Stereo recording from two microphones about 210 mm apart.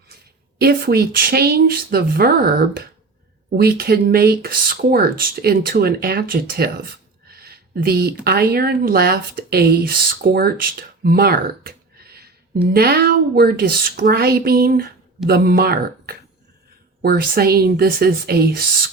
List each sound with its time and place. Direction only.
0.6 s speech: 50° right (ahead or behind)
7.3 s a sound: 45° right (ahead or behind)
8.2 s speech: 45° right (ahead or behind)